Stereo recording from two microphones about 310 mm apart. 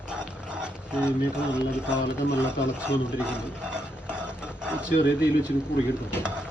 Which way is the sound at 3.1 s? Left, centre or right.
Centre.